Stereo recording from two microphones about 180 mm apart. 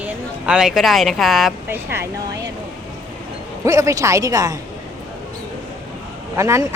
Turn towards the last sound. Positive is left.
turn(degrees=-15)  # may be behind; listen again after turning